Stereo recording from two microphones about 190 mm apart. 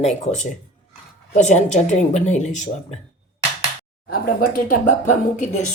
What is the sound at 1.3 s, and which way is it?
A woman's voice, 40° left (ahead or behind).